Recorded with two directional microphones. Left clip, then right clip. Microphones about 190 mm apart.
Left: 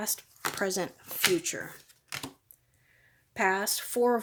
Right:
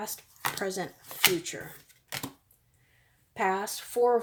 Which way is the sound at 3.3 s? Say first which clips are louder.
Left 1 dB; 45° left (ahead or behind).